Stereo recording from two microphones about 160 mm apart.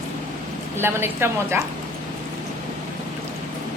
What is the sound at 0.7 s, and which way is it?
Speech, 15° right (ahead or behind).